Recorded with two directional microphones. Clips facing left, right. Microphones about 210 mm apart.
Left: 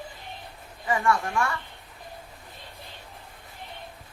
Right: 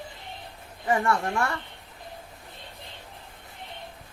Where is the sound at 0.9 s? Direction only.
35° right (ahead or behind).